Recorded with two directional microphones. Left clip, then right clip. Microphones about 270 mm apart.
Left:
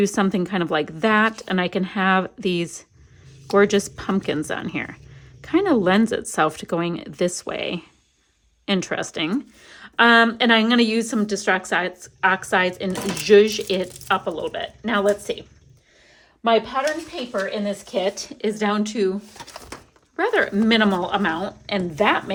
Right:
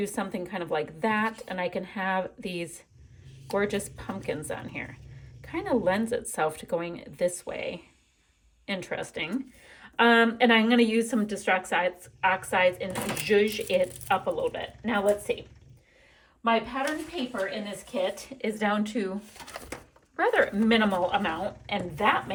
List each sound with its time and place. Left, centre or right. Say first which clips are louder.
0.0 s a woman's voice: left 11 dB; left
13.7 s a woman's voice: left 3 dB; centre
18.4 s a woman's voice: left 5 dB; centre
20.1 s a woman's voice: left 4 dB; centre